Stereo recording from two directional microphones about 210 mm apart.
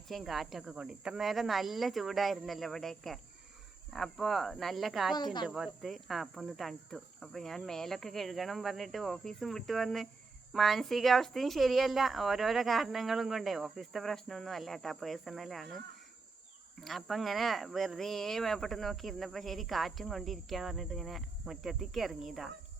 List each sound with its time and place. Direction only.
0.1 s speech: centre (ahead or behind)
5.1 s speech: 20° left (ahead or behind)
5.5 s speech: centre (ahead or behind)
16.8 s speech: centre (ahead or behind)